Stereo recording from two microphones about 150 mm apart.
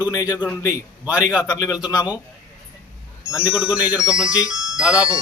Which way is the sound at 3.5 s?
5° right (ahead or behind).